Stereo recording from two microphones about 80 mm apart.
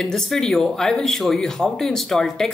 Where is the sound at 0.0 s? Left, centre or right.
Centre.